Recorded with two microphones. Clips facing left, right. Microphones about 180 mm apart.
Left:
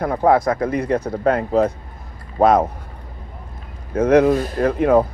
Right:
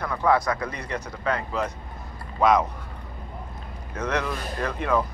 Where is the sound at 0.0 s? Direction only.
50° left (ahead or behind).